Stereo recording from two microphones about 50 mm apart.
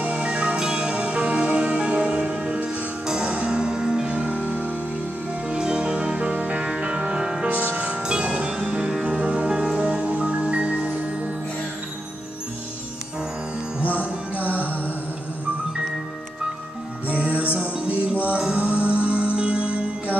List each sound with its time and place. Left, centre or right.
0.0 s music: right
5.5 s music: centre
7.4 s music: right
7.7 s music: right
13.9 s music: right
17.1 s music: right